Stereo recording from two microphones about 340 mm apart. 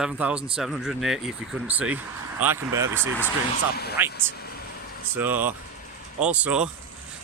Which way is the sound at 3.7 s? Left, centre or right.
Left.